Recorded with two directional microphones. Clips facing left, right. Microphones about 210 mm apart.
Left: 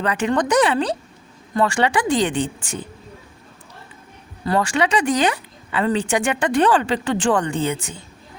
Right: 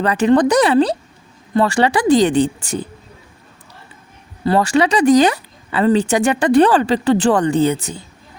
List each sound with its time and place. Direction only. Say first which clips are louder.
0.0 s speech: right 7 dB; 35° right (ahead or behind)
4.4 s speech: right 5 dB; 35° right (ahead or behind)